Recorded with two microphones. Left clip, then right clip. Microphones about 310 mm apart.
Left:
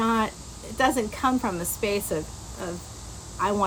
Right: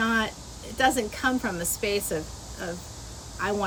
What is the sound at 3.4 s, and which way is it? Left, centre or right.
Speech, centre.